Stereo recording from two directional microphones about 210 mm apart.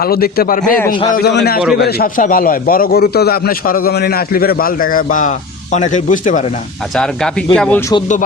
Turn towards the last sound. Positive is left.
turn(degrees=5)  # may be behind; listen again after turning